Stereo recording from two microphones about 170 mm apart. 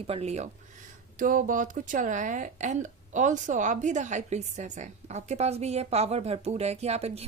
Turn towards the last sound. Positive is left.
turn(degrees=-40)  # may be behind; listen again after turning